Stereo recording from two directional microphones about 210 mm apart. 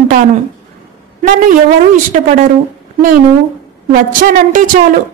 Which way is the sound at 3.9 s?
40° right (ahead or behind).